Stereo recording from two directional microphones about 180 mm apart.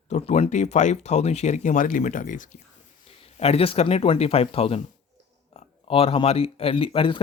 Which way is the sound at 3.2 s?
35° left (ahead or behind).